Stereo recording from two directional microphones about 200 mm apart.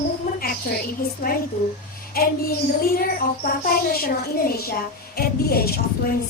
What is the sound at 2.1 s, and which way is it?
A woman's voice, 45° left (ahead or behind).